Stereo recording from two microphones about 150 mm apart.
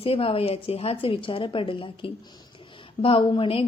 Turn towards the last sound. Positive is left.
turn(degrees=35)  # may be behind; listen again after turning